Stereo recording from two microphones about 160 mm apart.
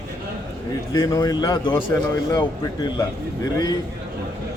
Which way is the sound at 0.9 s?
25° left (ahead or behind).